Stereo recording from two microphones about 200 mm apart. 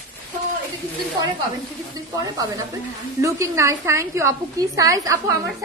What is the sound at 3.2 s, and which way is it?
A woman's voice, 15° right (ahead or behind).